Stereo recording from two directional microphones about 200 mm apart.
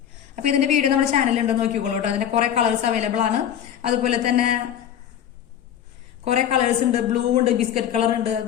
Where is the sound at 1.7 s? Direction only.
35° right (ahead or behind).